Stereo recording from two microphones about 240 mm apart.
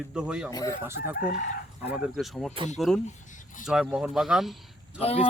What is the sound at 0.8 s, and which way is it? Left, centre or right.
Chicken, centre.